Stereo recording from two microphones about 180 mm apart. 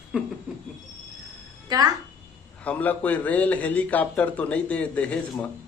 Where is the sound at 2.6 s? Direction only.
10° left (ahead or behind).